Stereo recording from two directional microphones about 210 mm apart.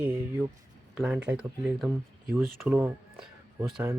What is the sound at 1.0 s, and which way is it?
Speech, 5° right (ahead or behind).